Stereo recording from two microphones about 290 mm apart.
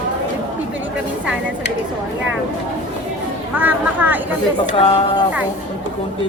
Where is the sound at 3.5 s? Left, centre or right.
Centre.